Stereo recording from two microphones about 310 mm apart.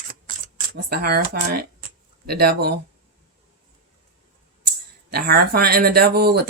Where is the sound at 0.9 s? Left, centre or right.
Right.